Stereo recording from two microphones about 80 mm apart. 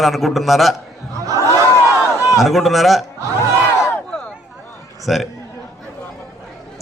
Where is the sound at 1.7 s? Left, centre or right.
Left.